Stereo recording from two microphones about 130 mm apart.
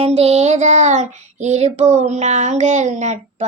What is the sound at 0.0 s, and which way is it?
Child singing, 50° right (ahead or behind).